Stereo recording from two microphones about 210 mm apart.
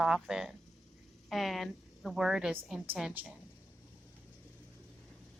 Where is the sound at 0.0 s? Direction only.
5° right (ahead or behind).